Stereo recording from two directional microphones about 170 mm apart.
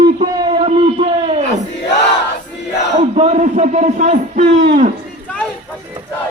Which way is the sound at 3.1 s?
40° right (ahead or behind).